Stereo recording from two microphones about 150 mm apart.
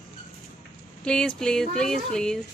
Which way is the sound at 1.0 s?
5° left (ahead or behind).